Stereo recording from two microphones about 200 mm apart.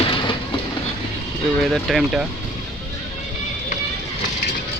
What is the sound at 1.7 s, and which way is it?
Speech, centre (ahead or behind).